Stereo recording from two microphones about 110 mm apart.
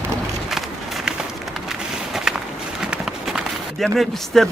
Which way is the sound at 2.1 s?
5° right (ahead or behind).